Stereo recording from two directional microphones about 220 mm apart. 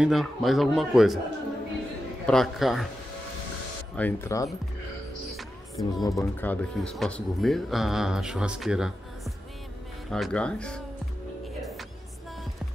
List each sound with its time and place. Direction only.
0.0 s speech: centre (ahead or behind)
2.2 s speech: centre (ahead or behind)
3.9 s speech: 10° left (ahead or behind)
5.3 s music: centre (ahead or behind)
6.1 s speech: 10° left (ahead or behind)